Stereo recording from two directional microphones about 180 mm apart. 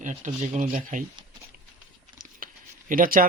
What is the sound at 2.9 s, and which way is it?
Speech, 50° right (ahead or behind).